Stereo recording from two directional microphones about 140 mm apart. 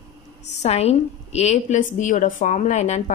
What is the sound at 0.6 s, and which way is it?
A woman's voice, 50° left (ahead or behind).